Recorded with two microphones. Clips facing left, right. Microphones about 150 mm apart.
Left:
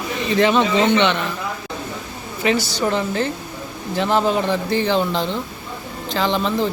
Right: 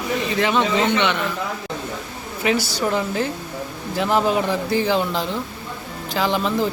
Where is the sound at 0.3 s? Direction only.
10° right (ahead or behind).